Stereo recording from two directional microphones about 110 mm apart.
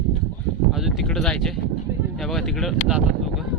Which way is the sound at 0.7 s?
Centre (ahead or behind).